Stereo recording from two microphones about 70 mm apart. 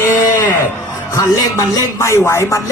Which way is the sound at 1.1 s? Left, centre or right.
Left.